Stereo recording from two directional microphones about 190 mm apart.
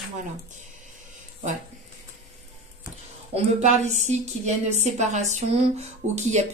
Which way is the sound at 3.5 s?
35° right (ahead or behind).